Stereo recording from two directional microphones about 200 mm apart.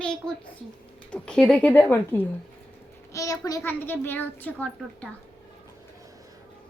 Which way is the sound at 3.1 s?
15° left (ahead or behind).